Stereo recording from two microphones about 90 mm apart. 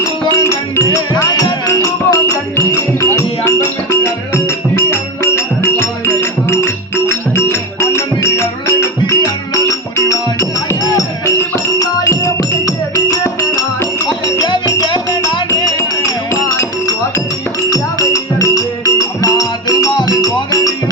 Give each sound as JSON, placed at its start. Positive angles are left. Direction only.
{"t": 0.0, "sound": "music", "side_deg": 35}
{"t": 0.9, "sound": "music", "side_deg": 50}
{"t": 1.6, "sound": "music", "side_deg": 35}
{"t": 14.4, "sound": "music", "side_deg": 55}
{"t": 15.5, "sound": "music", "side_deg": 40}